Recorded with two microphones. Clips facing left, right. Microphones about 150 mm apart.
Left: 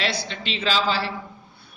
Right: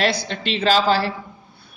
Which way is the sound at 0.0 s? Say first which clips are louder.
Right 6 dB; 45° right (ahead or behind).